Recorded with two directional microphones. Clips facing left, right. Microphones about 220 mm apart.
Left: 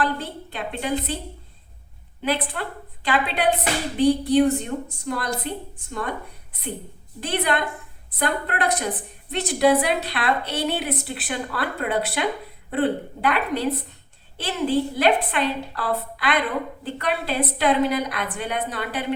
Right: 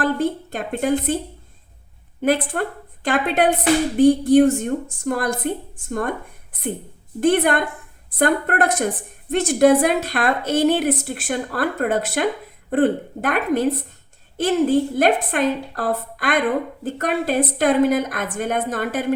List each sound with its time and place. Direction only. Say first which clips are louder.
0.0 s a woman's voice: right 6 dB; 45° right (ahead or behind)
2.2 s a woman's voice: right 6 dB; 50° right (ahead or behind)
7.2 s a woman's voice: right 7 dB; 50° right (ahead or behind)